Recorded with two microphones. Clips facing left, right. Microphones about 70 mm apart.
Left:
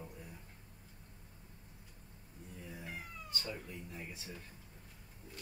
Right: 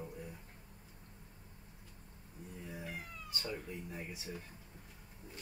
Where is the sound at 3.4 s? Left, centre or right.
Centre.